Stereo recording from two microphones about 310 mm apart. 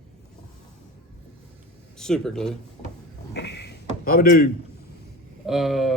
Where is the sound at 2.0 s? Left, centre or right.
Centre.